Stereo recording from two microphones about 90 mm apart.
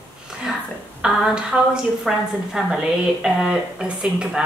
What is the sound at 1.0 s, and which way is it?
A woman's voice, 10° right (ahead or behind).